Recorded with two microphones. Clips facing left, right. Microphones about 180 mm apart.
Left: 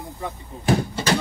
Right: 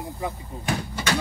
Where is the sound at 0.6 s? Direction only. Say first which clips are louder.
Left 7 dB; 35° left (ahead or behind).